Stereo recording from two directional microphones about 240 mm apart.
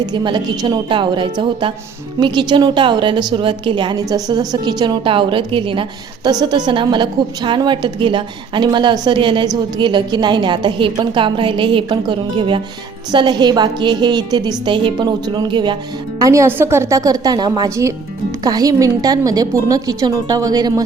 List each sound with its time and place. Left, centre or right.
0.0 s a woman's voice: centre